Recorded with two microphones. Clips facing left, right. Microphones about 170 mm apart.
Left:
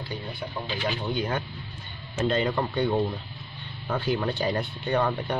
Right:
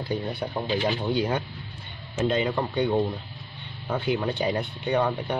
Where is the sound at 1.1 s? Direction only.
20° right (ahead or behind).